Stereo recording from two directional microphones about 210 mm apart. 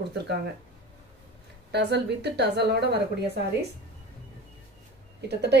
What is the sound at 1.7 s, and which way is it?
A woman's voice, 55° right (ahead or behind).